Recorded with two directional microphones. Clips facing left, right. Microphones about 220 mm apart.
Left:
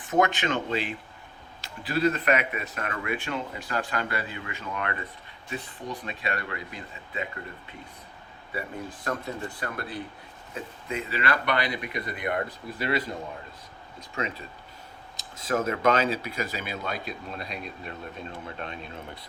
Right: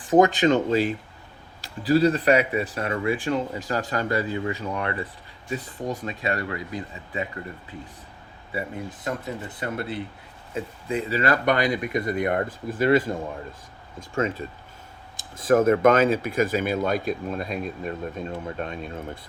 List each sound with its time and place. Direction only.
0.1 s speech: 35° right (ahead or behind)
5.5 s speech: 45° right (ahead or behind)
8.5 s speech: 20° right (ahead or behind); by 13.1 s 45° right (ahead or behind)
14.2 s speech: 45° right (ahead or behind)